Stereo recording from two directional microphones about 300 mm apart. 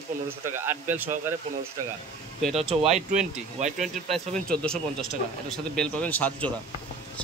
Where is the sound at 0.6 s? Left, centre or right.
Centre.